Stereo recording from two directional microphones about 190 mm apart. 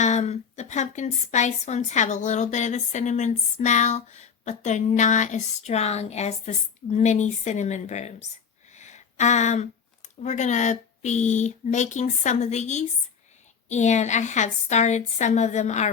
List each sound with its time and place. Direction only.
0.0 s a woman's voice: 35° left (ahead or behind)